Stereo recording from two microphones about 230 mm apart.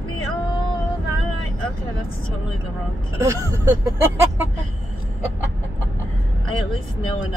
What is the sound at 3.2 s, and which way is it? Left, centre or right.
Speech, centre.